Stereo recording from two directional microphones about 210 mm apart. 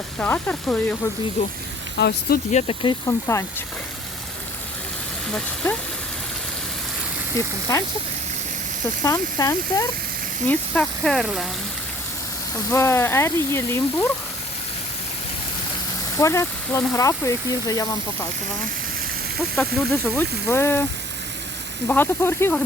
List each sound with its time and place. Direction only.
0.2 s speech: 5° left (ahead or behind)
1.4 s speech: 30° left (ahead or behind)
2.0 s speech: 50° left (ahead or behind)
2.5 s speech: 30° left (ahead or behind)
3.1 s speech: 15° left (ahead or behind)
7.3 s speech: 15° left (ahead or behind)
9.0 s speech: 15° left (ahead or behind)
10.5 s speech: 5° left (ahead or behind)
12.7 s speech: 10° left (ahead or behind)
16.1 s speech: 15° left (ahead or behind)
19.5 s speech: 5° left (ahead or behind)
21.8 s speech: 10° left (ahead or behind)